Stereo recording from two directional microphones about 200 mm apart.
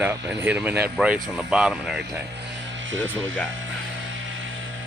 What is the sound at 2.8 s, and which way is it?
Music, 70° right (ahead or behind).